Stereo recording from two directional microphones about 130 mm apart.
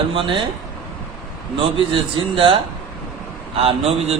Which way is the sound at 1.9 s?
40° right (ahead or behind).